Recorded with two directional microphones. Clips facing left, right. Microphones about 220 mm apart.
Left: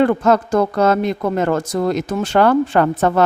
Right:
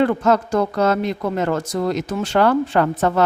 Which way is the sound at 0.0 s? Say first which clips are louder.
Left 2 dB; 50° left (ahead or behind).